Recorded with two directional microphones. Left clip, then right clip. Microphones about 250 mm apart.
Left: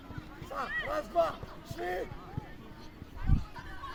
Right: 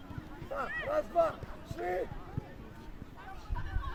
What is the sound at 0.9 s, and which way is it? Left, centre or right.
Speech, left.